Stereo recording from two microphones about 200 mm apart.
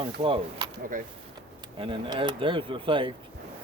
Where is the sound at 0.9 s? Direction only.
40° right (ahead or behind).